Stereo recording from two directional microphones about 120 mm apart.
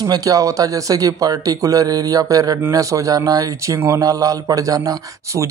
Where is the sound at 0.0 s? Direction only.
30° right (ahead or behind).